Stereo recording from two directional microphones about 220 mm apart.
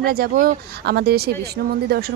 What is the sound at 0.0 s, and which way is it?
Speech, 45° right (ahead or behind).